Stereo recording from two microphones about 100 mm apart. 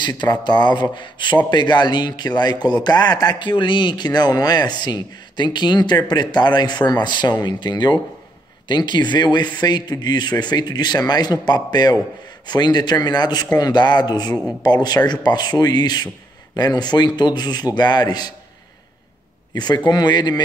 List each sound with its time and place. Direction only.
0.2 s a man's voice: 50° left (ahead or behind)
19.5 s a man's voice: 45° left (ahead or behind)